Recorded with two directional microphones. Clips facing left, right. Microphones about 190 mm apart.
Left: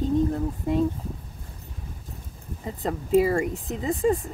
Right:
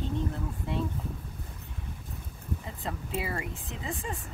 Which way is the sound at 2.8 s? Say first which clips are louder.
Left 14 dB; 40° left (ahead or behind).